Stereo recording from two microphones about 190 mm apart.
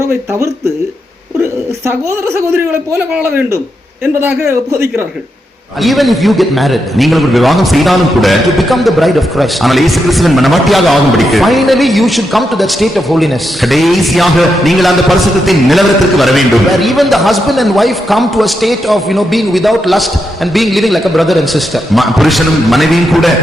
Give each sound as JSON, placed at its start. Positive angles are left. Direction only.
{"t": 0.0, "sound": "speech", "side_deg": -15}
{"t": 5.8, "sound": "a man's voice", "side_deg": 0}